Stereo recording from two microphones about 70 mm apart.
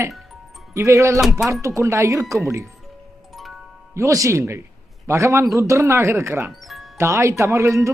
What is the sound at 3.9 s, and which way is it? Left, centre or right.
Speech, right.